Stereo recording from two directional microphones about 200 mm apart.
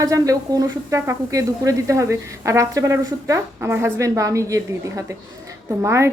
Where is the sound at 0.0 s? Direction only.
15° right (ahead or behind).